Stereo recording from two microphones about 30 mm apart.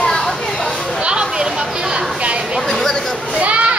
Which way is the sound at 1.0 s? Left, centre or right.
Right.